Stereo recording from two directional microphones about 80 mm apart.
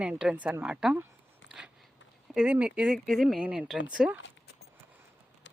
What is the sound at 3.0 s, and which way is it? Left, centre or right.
Speech, centre.